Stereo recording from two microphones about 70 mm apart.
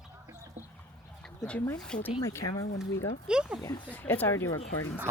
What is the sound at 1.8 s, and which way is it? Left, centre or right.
Speech, centre.